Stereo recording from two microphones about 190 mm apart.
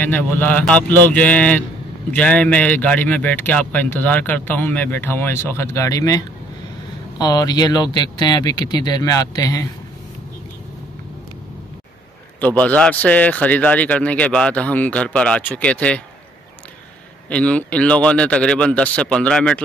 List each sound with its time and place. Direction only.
0.0 s speech: 10° left (ahead or behind)
12.4 s speech: 10° left (ahead or behind)
17.3 s a man's voice: 5° left (ahead or behind)